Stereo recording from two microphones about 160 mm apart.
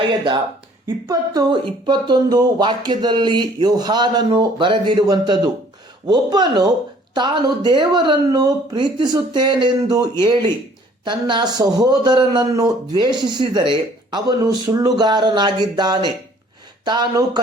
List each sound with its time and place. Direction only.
0.9 s a man's voice: 20° right (ahead or behind)